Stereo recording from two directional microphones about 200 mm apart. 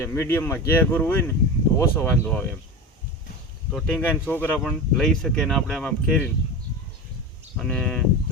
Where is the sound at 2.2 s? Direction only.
5° left (ahead or behind).